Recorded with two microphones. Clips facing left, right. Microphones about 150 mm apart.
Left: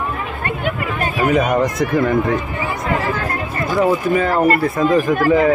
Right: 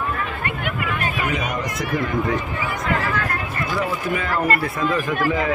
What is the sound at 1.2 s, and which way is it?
Speech, 45° left (ahead or behind).